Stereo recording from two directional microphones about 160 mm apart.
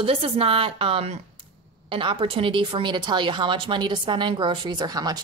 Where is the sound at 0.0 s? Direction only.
35° right (ahead or behind).